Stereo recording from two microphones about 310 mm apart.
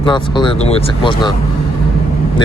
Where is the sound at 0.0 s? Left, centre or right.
Centre.